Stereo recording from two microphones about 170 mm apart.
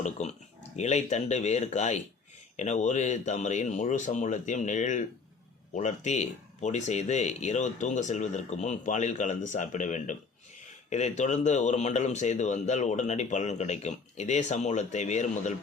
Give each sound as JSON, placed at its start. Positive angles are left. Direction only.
{"t": 0.2, "sound": "speech", "side_deg": 45}